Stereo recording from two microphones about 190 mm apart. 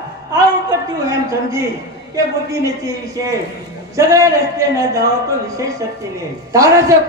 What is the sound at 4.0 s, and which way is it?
A man's voice, 15° right (ahead or behind).